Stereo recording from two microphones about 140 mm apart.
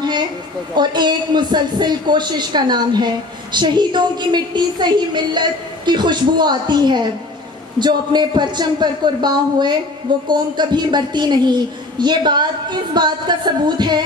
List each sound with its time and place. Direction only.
0.7 s a man's voice: 30° right (ahead or behind)